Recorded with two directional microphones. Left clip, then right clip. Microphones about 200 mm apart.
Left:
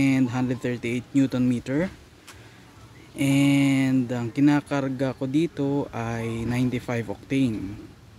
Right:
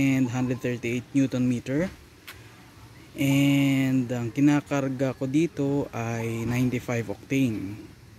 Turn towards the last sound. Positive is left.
turn(degrees=-5)  # may be behind; listen again after turning